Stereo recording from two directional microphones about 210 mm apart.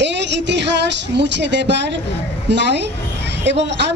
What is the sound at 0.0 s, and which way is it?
Speech, 55° right (ahead or behind).